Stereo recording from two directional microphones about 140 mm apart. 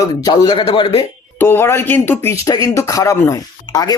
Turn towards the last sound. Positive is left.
turn(degrees=25)  # may be behind; listen again after turning